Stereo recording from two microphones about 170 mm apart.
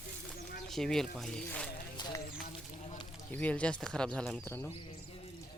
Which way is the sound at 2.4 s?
45° left (ahead or behind).